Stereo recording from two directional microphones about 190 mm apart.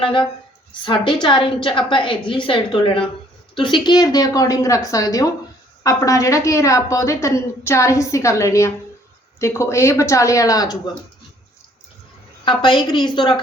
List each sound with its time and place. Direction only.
0.0 s a woman's voice: 25° left (ahead or behind)
12.5 s a woman's voice: 25° left (ahead or behind)